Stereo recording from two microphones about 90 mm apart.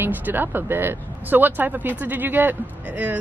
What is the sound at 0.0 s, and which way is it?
A woman's voice, 20° right (ahead or behind).